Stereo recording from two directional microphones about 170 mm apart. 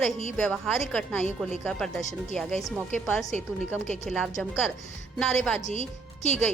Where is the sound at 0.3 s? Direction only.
5° left (ahead or behind).